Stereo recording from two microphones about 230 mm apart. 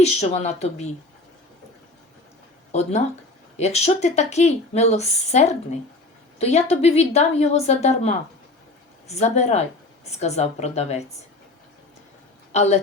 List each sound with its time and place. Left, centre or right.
0.0 s a woman's voice: left
3.6 s a woman's voice: left
12.5 s a woman's voice: left